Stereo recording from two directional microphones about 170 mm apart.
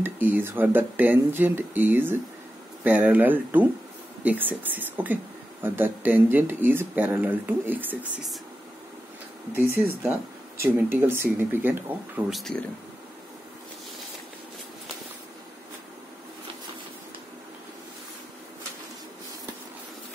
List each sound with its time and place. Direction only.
0.0 s a woman's voice: 10° right (ahead or behind)
10.6 s a woman's voice: 15° right (ahead or behind)
12.3 s speech: centre (ahead or behind)